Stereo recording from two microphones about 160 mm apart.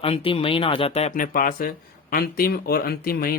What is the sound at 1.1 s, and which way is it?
Speech, 60° left (ahead or behind).